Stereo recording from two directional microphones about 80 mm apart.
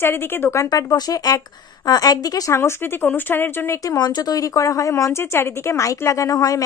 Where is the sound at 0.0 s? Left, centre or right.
Left.